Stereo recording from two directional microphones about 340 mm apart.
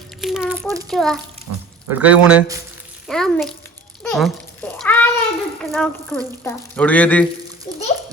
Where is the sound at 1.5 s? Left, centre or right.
Right.